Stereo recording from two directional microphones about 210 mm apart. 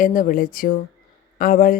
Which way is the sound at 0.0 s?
40° left (ahead or behind).